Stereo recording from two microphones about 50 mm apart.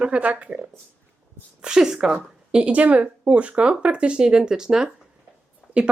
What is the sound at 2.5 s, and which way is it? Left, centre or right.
Speech, right.